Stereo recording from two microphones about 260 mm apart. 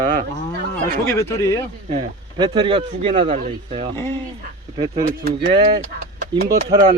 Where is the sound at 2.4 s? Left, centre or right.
Centre.